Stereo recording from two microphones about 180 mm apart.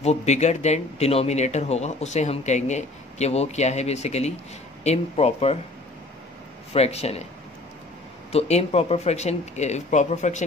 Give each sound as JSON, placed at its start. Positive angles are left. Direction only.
{"t": 0.0, "sound": "speech", "side_deg": 35}
{"t": 6.7, "sound": "speech", "side_deg": 35}
{"t": 8.3, "sound": "speech", "side_deg": 35}